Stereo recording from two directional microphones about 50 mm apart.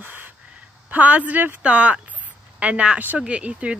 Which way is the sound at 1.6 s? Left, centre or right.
Right.